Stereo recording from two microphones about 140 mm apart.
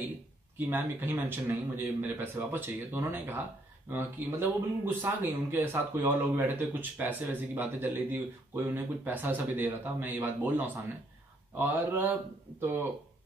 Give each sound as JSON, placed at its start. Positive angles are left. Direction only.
{"t": 0.6, "sound": "speech", "side_deg": -15}